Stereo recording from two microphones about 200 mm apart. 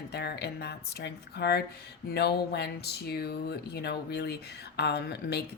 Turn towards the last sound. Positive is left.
turn(degrees=55)  # may be behind; listen again after turning